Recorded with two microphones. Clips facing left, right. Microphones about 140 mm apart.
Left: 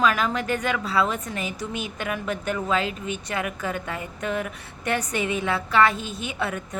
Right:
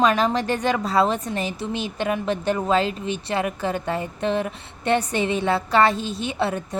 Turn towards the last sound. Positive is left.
turn(degrees=-30)  # may be behind; listen again after turning